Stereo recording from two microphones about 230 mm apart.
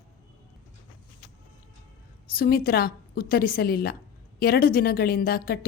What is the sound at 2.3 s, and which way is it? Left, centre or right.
A woman's voice, left.